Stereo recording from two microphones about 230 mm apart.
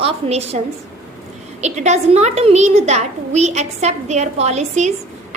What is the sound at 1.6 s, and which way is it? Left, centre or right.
A child's voice, right.